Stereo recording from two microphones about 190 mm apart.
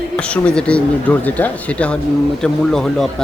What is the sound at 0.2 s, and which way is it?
Speech, 5° left (ahead or behind).